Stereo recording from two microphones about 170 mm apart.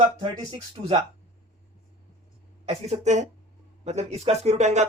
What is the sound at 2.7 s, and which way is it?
Speech, 40° right (ahead or behind).